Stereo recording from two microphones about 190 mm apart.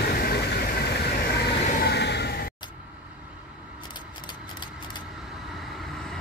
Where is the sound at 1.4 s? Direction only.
55° left (ahead or behind).